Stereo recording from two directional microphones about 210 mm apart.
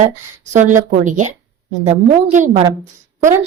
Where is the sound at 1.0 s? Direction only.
35° right (ahead or behind).